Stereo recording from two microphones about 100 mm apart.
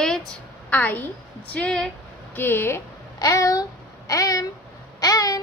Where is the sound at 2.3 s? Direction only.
20° left (ahead or behind).